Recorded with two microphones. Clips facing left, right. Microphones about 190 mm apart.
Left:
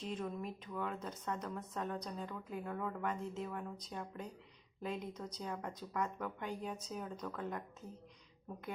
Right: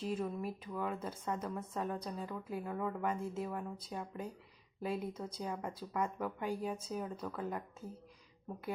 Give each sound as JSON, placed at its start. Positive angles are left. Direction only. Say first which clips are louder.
{"t": 0.0, "sound": "a woman's voice", "louder": "right 4 dB", "side_deg": -5}